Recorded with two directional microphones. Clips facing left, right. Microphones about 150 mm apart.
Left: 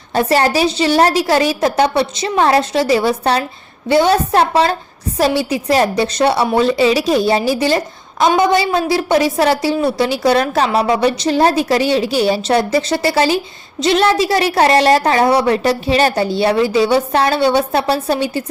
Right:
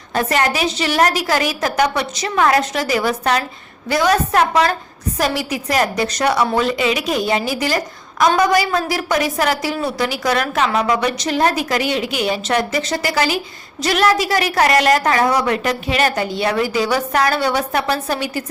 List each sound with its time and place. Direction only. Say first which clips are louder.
0.1 s a woman's voice: left 4 dB; 30° left (ahead or behind)